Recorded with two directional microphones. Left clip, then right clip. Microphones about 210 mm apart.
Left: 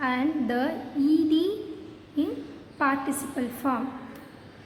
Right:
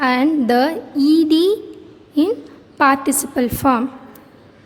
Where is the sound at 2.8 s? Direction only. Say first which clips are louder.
Right 11 dB; 55° right (ahead or behind).